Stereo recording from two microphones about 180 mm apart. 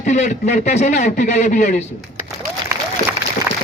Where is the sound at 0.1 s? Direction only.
40° left (ahead or behind).